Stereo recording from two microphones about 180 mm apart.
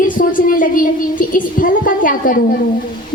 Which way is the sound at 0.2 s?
50° left (ahead or behind).